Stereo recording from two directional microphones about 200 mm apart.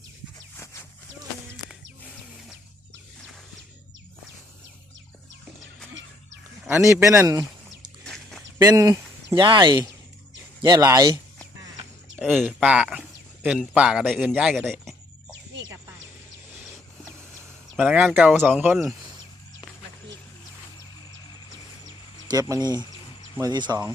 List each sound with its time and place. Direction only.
0.3 s a sound: 15° left (ahead or behind)
6.7 s speech: 10° right (ahead or behind)
8.0 s a sound: centre (ahead or behind)
8.6 s speech: 15° right (ahead or behind)
12.2 s speech: centre (ahead or behind)
17.7 s speech: 5° right (ahead or behind)
22.3 s speech: 15° right (ahead or behind)